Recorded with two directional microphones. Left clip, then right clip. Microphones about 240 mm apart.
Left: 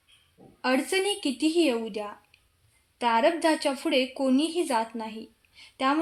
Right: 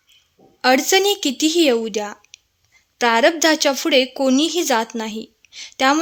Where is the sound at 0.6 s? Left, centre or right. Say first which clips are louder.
Right 11 dB; right.